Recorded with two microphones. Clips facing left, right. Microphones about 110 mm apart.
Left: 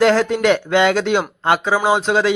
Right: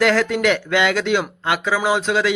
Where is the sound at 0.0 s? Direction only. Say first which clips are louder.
Left 3 dB; 30° left (ahead or behind).